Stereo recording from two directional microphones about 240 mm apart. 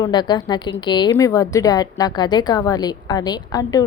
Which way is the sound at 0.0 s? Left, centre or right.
Centre.